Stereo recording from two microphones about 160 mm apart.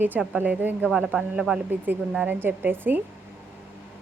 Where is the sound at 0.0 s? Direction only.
10° right (ahead or behind).